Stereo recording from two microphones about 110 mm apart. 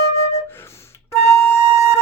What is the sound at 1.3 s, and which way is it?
Flute, 25° left (ahead or behind).